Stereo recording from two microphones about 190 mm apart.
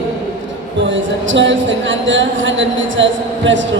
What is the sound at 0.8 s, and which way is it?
Speech, 85° right.